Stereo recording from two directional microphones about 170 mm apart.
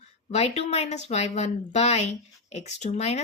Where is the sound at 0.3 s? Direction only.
40° left (ahead or behind).